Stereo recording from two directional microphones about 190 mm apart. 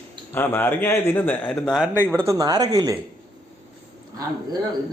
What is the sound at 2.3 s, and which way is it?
Speech, 20° right (ahead or behind).